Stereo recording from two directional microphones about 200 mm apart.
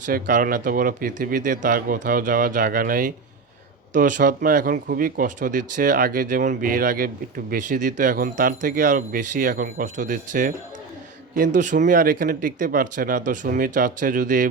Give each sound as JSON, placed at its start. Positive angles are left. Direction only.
{"t": 0.0, "sound": "speech", "side_deg": -40}